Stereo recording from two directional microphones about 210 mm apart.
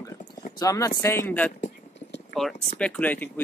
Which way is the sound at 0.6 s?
15° left (ahead or behind).